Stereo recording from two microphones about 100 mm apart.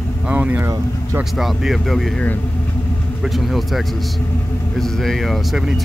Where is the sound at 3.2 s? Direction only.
Centre (ahead or behind).